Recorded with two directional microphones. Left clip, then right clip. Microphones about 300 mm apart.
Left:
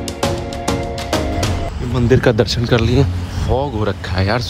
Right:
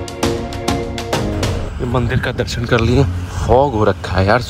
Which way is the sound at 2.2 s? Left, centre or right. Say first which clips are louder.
Left 6 dB; centre.